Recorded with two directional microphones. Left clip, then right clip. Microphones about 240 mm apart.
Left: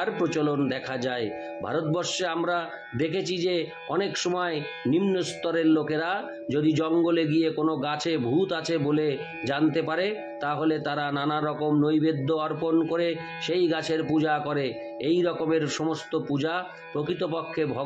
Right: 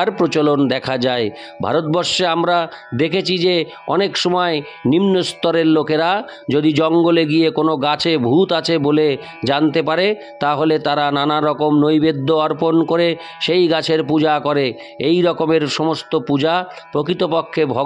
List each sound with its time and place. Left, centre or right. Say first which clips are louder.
0.0 s speech: right 10 dB; right